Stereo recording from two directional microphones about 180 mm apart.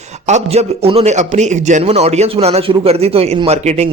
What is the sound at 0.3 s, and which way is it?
A man's voice, 40° right (ahead or behind).